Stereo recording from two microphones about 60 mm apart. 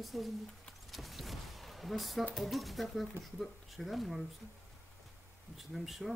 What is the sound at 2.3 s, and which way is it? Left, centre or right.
A woman's voice, centre.